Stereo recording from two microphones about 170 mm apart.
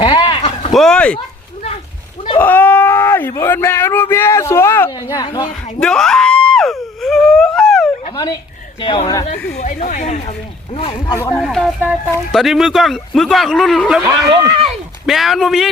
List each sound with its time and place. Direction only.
0.0 s a sound: 25° left (ahead or behind)
0.7 s speech: 5° left (ahead or behind)
2.4 s a sound: 10° left (ahead or behind)
5.8 s a sound: 5° left (ahead or behind)
8.1 s a sound: 25° left (ahead or behind)
8.8 s speech: 30° left (ahead or behind)
9.6 s speech: 50° left (ahead or behind)
10.8 s speech: 30° left (ahead or behind)
11.0 s speech: 15° left (ahead or behind)
11.3 s speech: centre (ahead or behind)
14.0 s speech: 20° right (ahead or behind)
15.0 s speech: centre (ahead or behind)